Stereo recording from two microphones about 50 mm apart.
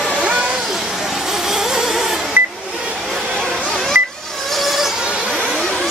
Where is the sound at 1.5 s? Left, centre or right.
Centre.